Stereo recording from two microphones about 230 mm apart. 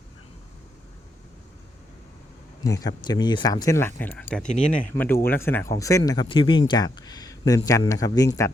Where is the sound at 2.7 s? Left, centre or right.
Centre.